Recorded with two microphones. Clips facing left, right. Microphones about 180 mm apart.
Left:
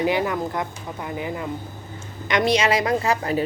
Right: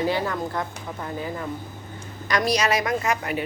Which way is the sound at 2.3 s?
25° left (ahead or behind).